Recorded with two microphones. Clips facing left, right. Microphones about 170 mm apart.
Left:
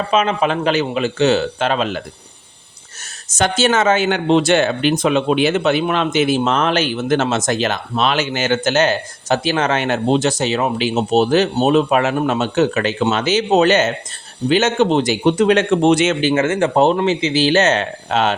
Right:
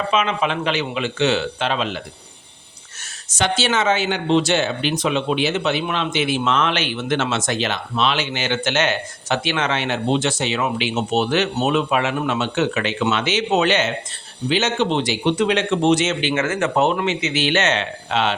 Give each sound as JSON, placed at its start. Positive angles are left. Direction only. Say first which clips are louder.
{"t": 0.1, "sound": "speech", "louder": "left 5 dB", "side_deg": 40}
{"t": 3.3, "sound": "speech", "louder": "left 4 dB", "side_deg": 45}
{"t": 16.3, "sound": "speech", "louder": "left 5 dB", "side_deg": 30}